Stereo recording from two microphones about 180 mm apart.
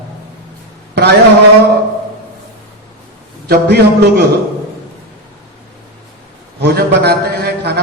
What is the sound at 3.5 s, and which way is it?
Speech, 65° right (ahead or behind).